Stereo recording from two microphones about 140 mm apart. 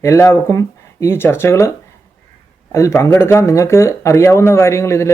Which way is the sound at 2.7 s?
20° left (ahead or behind).